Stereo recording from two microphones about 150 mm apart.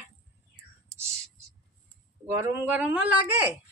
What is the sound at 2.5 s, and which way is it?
Speech, 10° right (ahead or behind).